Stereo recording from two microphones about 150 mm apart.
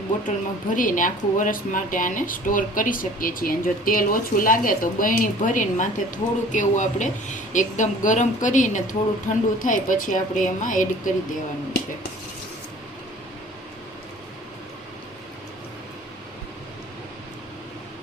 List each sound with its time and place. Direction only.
0.3 s speech: 60° left (ahead or behind)